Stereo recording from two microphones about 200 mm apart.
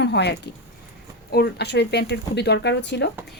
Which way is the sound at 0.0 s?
60° left (ahead or behind).